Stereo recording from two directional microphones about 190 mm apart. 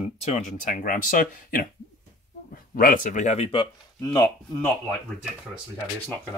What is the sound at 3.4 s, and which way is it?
Speech, 20° left (ahead or behind).